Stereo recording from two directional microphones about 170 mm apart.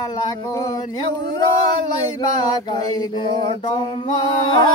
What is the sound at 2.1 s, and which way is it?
Mantra, 25° left (ahead or behind).